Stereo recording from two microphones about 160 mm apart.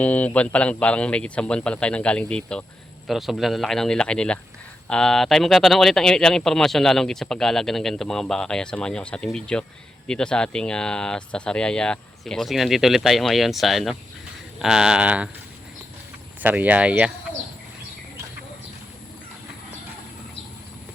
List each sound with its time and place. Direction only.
0.0 s speech: 10° left (ahead or behind); by 15.3 s 10° right (ahead or behind)
16.4 s speech: 10° right (ahead or behind)